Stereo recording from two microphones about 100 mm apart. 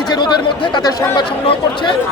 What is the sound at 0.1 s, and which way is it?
Speech, 50° left (ahead or behind).